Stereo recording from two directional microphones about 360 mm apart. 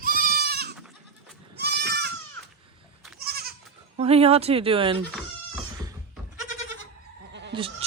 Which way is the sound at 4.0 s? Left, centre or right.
Centre.